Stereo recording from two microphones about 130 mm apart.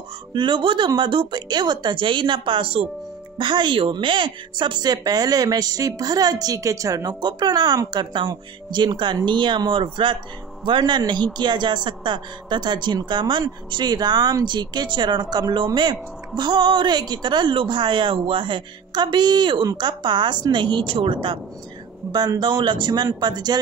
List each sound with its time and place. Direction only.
0.3 s speech: 35° right (ahead or behind)